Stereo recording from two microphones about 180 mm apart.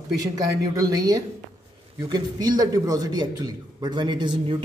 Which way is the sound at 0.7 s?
20° right (ahead or behind).